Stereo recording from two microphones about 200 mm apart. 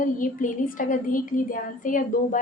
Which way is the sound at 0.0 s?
40° left (ahead or behind).